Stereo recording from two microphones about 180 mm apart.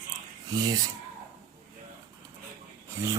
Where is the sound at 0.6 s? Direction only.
20° right (ahead or behind).